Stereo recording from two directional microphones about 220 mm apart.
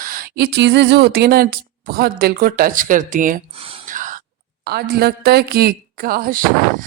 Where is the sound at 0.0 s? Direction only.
40° right (ahead or behind).